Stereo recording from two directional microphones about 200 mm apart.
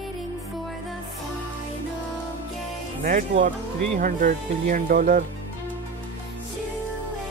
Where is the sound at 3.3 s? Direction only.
30° right (ahead or behind).